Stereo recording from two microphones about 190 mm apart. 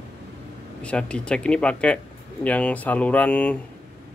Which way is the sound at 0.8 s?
5° left (ahead or behind).